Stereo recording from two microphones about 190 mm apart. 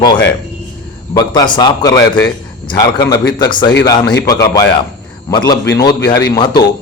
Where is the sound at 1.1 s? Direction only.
25° left (ahead or behind).